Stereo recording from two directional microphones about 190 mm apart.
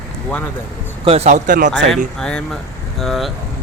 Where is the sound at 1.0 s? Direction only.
35° right (ahead or behind).